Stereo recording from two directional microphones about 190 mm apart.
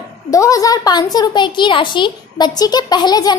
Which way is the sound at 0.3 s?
15° left (ahead or behind).